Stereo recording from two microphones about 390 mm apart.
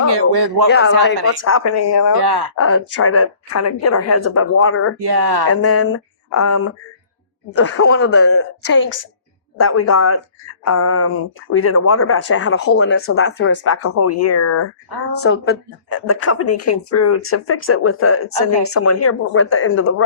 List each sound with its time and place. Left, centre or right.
0.1 s speech: right
0.7 s speech: left
2.2 s speech: right
2.6 s speech: left
4.9 s speech: right
5.5 s speech: left